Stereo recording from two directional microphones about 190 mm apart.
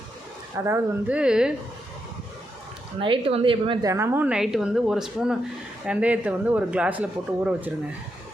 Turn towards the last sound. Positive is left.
turn(degrees=-5)  # may be behind; listen again after turning